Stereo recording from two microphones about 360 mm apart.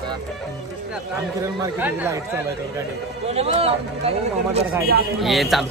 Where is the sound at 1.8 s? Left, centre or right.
Centre.